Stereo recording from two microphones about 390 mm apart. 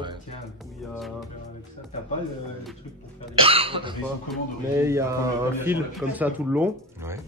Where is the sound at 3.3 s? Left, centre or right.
Centre.